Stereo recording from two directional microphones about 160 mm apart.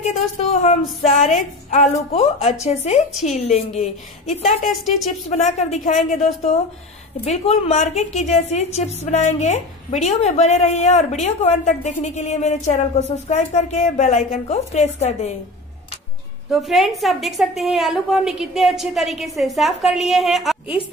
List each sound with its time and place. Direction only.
0.0 s a woman's voice: 45° left (ahead or behind)
3.1 s a woman's voice: centre (ahead or behind)
3.3 s a woman's voice: 40° left (ahead or behind)
4.6 s a woman's voice: centre (ahead or behind)
5.3 s a woman's voice: 45° left (ahead or behind)
7.2 s a woman's voice: 40° left (ahead or behind)
16.4 s a woman's voice: centre (ahead or behind)